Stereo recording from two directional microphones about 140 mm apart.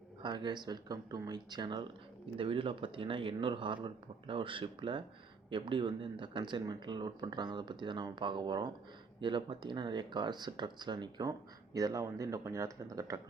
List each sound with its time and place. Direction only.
0.2 s speech: 35° right (ahead or behind)